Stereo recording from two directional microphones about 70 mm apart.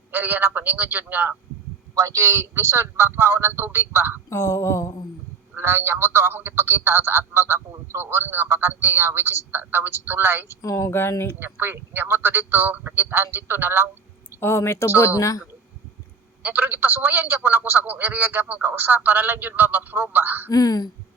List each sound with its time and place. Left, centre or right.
0.1 s a man's voice: right
2.0 s a man's voice: right
4.3 s a sound: left
5.5 s a man's voice: right
10.6 s a sound: left
11.3 s a man's voice: right
14.4 s speech: left
14.8 s a sound: left
16.4 s a man's voice: right
20.5 s speech: left